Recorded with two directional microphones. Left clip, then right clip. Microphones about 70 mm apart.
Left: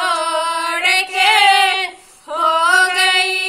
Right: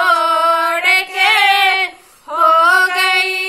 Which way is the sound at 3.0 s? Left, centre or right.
Right.